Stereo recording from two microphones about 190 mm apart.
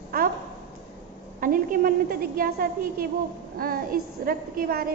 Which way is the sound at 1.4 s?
45° right (ahead or behind).